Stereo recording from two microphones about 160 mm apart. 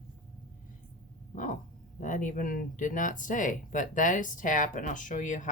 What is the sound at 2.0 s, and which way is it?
Speech, 55° left (ahead or behind).